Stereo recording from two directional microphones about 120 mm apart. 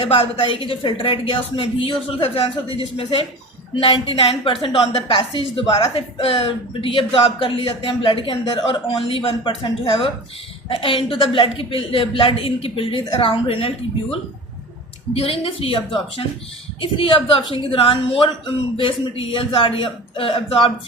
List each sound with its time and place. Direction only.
0.1 s a woman's voice: 45° left (ahead or behind)